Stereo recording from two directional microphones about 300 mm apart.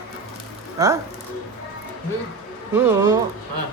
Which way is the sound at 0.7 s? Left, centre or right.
Centre.